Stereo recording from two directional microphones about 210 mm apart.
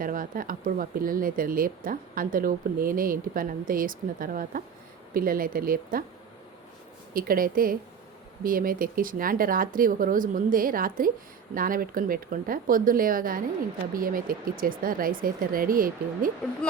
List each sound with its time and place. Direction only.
0.0 s speech: 40° right (ahead or behind)
7.1 s speech: 45° right (ahead or behind)